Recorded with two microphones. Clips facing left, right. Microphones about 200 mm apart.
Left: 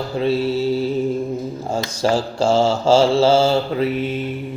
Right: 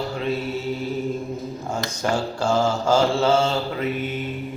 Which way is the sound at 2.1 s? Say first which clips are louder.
Left 4 dB; 90° left.